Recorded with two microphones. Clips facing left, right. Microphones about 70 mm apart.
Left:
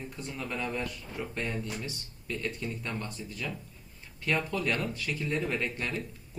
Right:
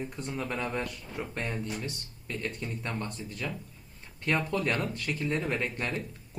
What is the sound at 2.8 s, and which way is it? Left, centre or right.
Speech, right.